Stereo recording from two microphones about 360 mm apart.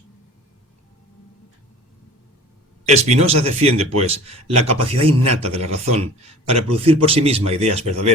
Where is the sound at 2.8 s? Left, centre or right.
Centre.